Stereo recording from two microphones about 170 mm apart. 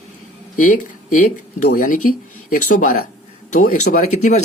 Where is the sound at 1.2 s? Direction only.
50° left (ahead or behind).